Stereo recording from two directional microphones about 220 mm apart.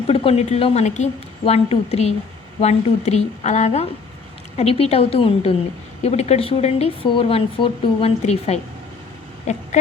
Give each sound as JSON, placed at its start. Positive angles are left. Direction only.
{"t": 0.1, "sound": "a woman's voice", "side_deg": 25}